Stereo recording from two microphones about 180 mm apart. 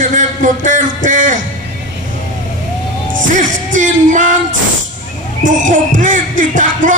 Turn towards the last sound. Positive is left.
turn(degrees=-45)  # may be behind; listen again after turning